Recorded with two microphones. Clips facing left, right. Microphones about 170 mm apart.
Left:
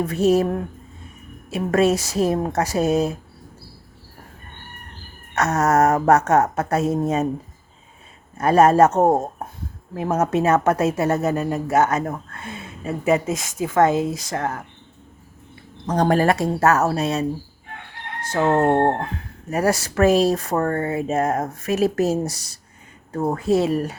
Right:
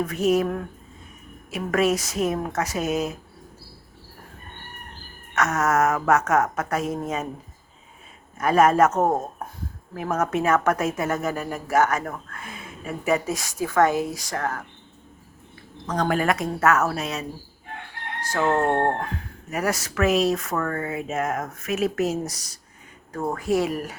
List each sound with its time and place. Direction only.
0.0 s speech: 30° left (ahead or behind)
5.3 s speech: 35° left (ahead or behind)
8.4 s a woman's voice: 30° left (ahead or behind)
15.9 s speech: 35° left (ahead or behind)
18.3 s a woman's voice: 20° left (ahead or behind)